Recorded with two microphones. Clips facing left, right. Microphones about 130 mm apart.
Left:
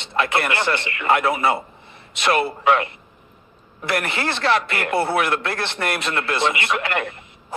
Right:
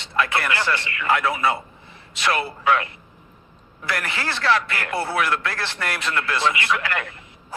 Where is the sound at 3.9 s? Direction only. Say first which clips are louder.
Left 4 dB; 25° left (ahead or behind).